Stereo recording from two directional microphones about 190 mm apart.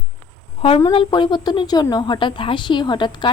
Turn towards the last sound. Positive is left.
turn(degrees=25)  # may be behind; listen again after turning